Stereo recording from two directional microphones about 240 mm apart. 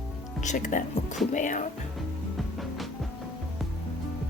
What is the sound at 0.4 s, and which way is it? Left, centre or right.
Speech, left.